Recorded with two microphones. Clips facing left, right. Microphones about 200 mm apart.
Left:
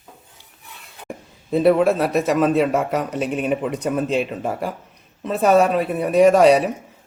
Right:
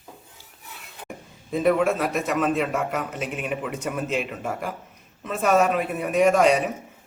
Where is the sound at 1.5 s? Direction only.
35° left (ahead or behind).